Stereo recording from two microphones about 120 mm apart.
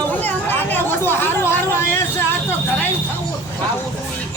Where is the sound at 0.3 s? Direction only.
15° left (ahead or behind).